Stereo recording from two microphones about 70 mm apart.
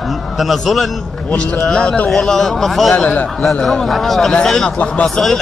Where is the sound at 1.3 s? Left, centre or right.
Centre.